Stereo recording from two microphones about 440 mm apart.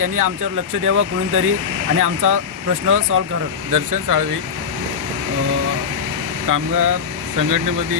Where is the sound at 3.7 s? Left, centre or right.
Right.